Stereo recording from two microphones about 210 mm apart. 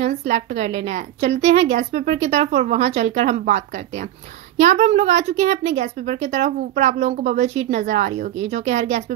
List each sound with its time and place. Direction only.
0.3 s a woman's voice: 30° right (ahead or behind)